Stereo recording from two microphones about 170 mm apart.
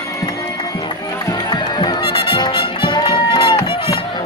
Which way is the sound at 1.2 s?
25° left (ahead or behind).